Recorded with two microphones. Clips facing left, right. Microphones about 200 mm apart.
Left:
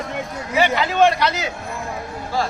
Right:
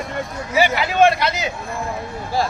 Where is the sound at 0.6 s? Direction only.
10° right (ahead or behind).